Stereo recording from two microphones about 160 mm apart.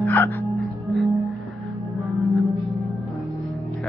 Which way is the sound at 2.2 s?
Centre (ahead or behind).